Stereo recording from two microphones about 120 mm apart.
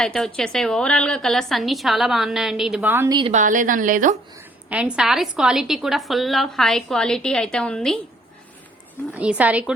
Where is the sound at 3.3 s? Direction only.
90° right.